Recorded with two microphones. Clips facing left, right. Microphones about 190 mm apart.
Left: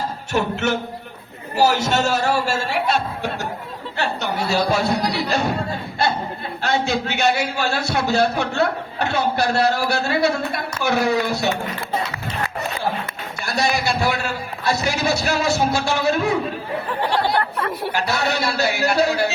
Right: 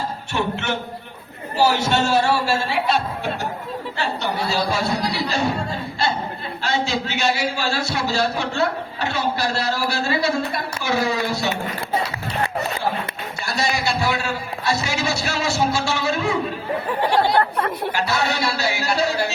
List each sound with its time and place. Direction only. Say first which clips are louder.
0.3 s music: left 3 dB; 40° left (ahead or behind)
1.9 s speech: right 1 dB; 40° left (ahead or behind)
4.7 s a man's voice: left 3 dB; 60° left (ahead or behind)
6.6 s a man's voice: left 2 dB; 55° left (ahead or behind)
14.7 s a man's voice: left 3 dB; 55° left (ahead or behind)
17.2 s speech: right 4 dB; 45° right (ahead or behind)
17.9 s a man's voice: left 2 dB; 55° left (ahead or behind)